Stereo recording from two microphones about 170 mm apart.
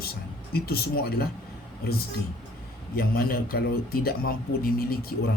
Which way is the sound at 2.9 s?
60° left (ahead or behind).